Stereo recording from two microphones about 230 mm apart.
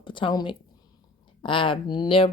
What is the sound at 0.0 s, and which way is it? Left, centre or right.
A woman's voice, left.